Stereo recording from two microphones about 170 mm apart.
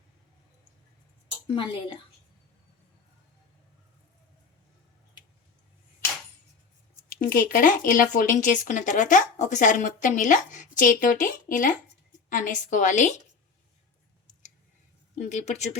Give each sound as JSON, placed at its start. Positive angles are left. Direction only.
{"t": 1.5, "sound": "a woman's voice", "side_deg": 30}
{"t": 7.2, "sound": "speech", "side_deg": 55}
{"t": 15.2, "sound": "speech", "side_deg": 45}